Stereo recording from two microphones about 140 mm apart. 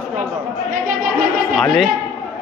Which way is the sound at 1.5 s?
Centre (ahead or behind).